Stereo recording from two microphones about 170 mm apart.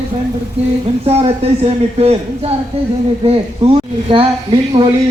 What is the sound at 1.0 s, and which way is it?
Speech, 35° right (ahead or behind).